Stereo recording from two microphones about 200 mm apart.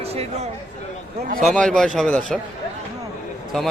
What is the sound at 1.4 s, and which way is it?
A man's voice, centre (ahead or behind).